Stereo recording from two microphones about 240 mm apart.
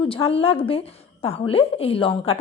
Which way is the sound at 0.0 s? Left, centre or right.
Left.